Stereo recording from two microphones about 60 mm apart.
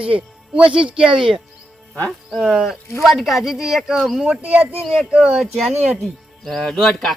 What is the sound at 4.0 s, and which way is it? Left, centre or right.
Speech, centre.